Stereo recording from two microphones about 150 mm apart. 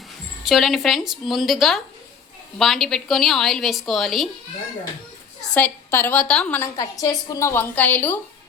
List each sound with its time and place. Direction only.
0.4 s a woman's voice: centre (ahead or behind)
5.5 s a woman's voice: 15° left (ahead or behind)
6.7 s a woman's voice: 25° left (ahead or behind)